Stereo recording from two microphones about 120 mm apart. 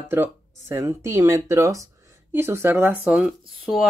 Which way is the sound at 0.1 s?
20° right (ahead or behind).